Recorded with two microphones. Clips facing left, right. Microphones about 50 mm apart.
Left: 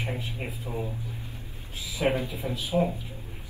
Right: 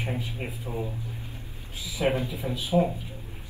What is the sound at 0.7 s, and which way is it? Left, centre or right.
Speech, centre.